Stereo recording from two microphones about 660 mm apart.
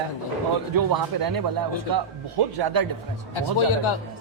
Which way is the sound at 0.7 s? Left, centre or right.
Right.